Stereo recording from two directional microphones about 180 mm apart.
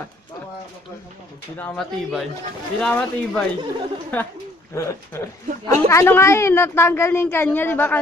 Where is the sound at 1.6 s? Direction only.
Centre (ahead or behind).